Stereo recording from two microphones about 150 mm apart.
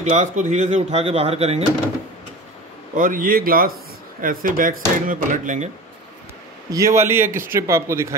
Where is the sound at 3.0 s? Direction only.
65° right (ahead or behind).